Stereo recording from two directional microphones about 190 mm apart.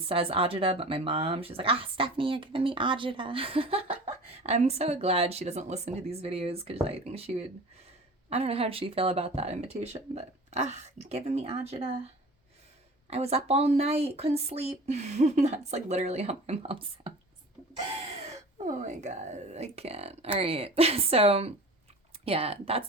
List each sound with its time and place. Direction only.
0.0 s speech: 30° right (ahead or behind)
18.3 s speech: 40° right (ahead or behind)